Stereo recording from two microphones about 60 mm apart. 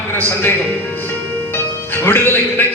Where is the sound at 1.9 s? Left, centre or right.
Left.